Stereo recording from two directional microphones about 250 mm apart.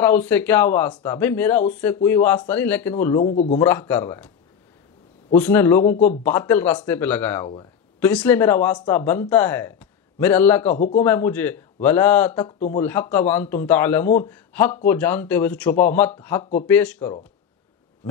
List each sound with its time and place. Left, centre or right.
0.0 s speech: centre
3.2 s a man's voice: left
3.5 s speech: centre
5.3 s speech: centre